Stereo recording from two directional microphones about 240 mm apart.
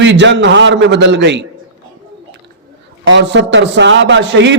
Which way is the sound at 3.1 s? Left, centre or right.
Right.